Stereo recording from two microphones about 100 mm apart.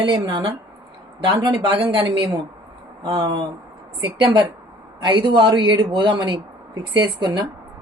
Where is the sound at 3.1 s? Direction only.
60° right (ahead or behind).